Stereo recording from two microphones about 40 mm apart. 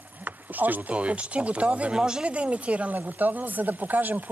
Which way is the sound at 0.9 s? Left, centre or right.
Right.